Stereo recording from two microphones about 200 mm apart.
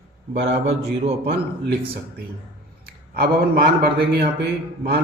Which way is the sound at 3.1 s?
50° right (ahead or behind).